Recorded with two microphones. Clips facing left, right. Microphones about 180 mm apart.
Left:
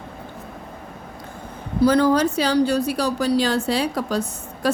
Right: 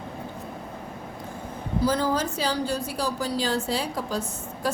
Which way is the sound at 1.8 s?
70° left (ahead or behind).